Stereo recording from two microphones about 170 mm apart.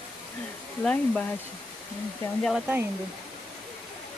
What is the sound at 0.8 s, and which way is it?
Speech, 5° left (ahead or behind).